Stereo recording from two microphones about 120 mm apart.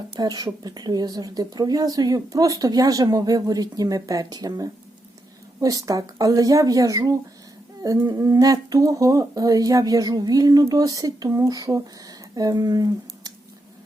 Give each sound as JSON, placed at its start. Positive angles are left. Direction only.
{"t": 0.2, "sound": "a woman's voice", "side_deg": -35}